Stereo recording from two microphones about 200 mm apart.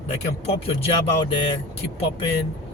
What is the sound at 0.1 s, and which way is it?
Speech, 30° left (ahead or behind).